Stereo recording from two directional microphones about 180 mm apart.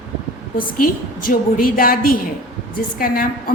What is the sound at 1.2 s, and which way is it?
A woman's voice, 50° left (ahead or behind).